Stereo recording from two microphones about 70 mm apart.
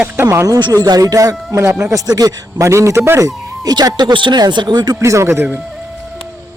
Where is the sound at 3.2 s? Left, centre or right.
Right.